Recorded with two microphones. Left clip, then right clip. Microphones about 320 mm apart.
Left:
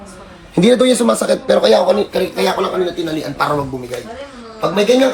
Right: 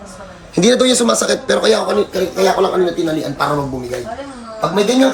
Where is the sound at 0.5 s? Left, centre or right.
Centre.